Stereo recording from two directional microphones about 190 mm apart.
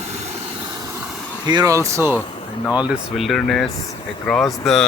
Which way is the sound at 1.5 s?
20° right (ahead or behind).